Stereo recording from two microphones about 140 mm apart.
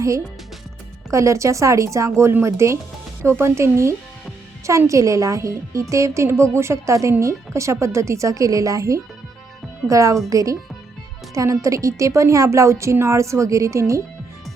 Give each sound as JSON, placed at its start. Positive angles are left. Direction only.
{"t": 1.1, "sound": "a woman's voice", "side_deg": -20}